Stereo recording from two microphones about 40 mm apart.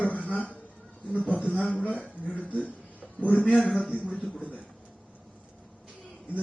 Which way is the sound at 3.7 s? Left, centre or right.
Centre.